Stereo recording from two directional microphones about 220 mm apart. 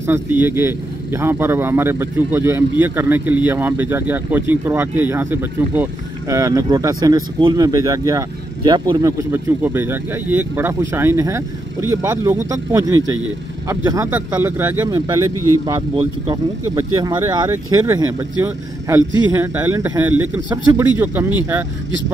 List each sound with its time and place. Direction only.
0.0 s speech: 10° right (ahead or behind)
15.3 s speech: 90° right
15.6 s speech: 20° right (ahead or behind)